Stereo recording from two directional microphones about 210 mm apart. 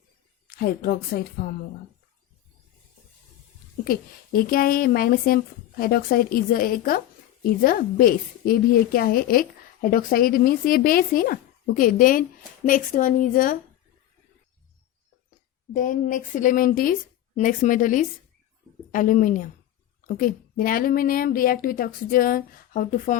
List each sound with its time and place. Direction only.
0.5 s a woman's voice: 45° left (ahead or behind)
3.8 s a woman's voice: 45° left (ahead or behind)
15.7 s a woman's voice: 40° left (ahead or behind)